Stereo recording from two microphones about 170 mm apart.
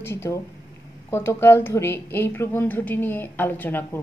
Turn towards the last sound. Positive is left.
turn(degrees=10)  # may be behind; listen again after turning